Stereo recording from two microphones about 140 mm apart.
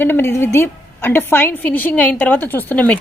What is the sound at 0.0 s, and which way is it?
A woman's voice, 15° left (ahead or behind).